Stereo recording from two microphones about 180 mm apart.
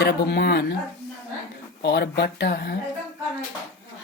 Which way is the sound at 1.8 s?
65° left (ahead or behind).